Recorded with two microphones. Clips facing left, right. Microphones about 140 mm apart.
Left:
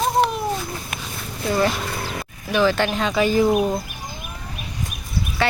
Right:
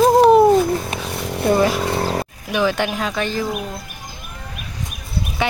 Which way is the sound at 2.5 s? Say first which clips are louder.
Even; 15° right (ahead or behind).